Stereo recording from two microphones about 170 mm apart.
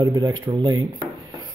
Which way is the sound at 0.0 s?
25° right (ahead or behind).